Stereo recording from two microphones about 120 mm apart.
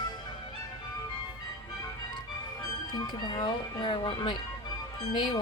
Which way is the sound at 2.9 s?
40° left (ahead or behind).